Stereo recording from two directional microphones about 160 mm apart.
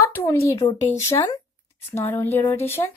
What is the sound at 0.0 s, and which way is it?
A woman's voice, 15° left (ahead or behind).